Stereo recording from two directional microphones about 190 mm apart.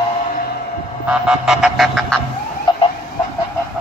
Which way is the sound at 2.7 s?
25° left (ahead or behind).